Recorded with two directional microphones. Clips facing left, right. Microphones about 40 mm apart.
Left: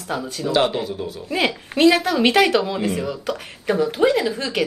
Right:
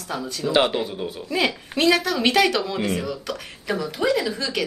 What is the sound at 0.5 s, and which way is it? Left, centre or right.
Speech, right.